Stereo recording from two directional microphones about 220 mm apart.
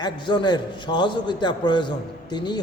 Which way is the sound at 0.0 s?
20° left (ahead or behind).